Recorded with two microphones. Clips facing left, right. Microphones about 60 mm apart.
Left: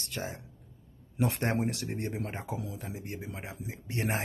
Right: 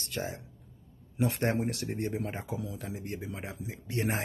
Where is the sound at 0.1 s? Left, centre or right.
Left.